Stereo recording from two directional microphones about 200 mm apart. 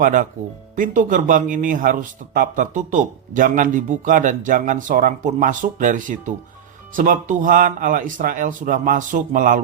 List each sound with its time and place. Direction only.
0.0 s speech: 40° right (ahead or behind)